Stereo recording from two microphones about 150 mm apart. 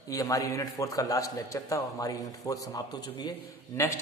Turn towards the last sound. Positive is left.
turn(degrees=20)  # may be behind; listen again after turning